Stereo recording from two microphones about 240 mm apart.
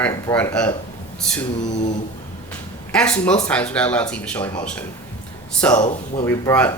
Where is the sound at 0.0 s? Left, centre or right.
Centre.